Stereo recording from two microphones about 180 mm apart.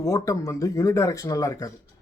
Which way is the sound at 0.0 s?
20° left (ahead or behind).